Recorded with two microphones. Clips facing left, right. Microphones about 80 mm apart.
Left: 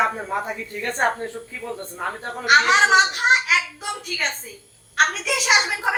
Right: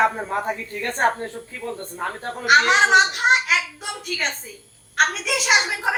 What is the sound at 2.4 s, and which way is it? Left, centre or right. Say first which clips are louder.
A child's voice: even; centre.